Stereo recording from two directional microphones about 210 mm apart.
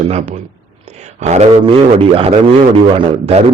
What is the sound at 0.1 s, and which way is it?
Speech, 35° right (ahead or behind).